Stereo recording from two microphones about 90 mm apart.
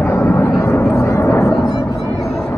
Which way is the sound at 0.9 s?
35° left (ahead or behind).